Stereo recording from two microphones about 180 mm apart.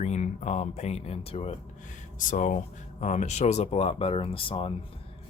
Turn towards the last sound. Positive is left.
turn(degrees=30)  # may be behind; listen again after turning